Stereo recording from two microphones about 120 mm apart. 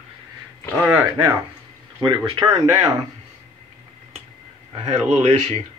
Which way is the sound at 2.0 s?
45° right (ahead or behind).